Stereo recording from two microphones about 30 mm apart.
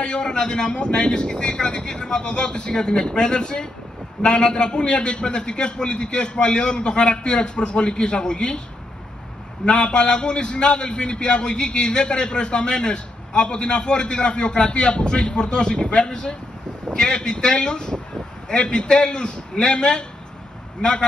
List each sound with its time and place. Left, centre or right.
0.0 s a man's voice: left
9.7 s a man's voice: left